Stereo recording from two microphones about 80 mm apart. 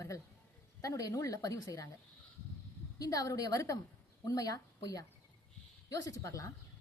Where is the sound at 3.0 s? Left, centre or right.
Left.